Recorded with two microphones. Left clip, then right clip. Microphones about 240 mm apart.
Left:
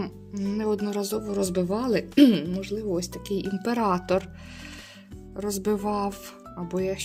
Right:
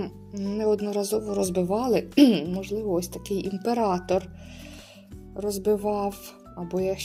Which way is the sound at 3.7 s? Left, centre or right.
Left.